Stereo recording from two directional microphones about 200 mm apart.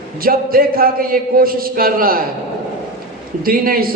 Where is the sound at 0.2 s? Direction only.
45° right (ahead or behind).